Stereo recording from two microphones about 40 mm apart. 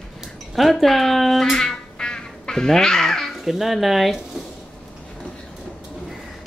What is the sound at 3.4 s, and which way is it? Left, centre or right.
Speech, centre.